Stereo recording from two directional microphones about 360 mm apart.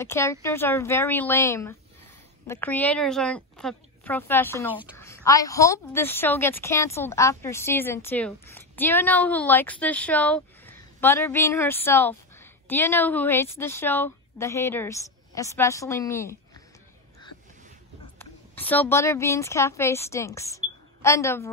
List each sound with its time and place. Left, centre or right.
0.0 s a woman's voice: centre
18.2 s speech: centre